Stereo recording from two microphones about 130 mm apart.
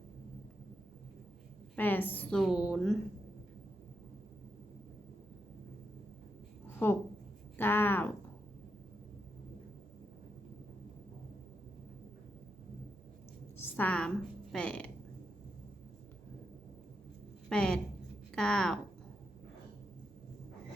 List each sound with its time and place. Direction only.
1.7 s a woman's voice: 15° left (ahead or behind)
2.4 s a woman's voice: 5° right (ahead or behind)
6.8 s a woman's voice: 15° left (ahead or behind)
13.6 s a sound: 15° left (ahead or behind)
14.5 s a woman's voice: 5° left (ahead or behind)
17.5 s a woman's voice: 5° left (ahead or behind)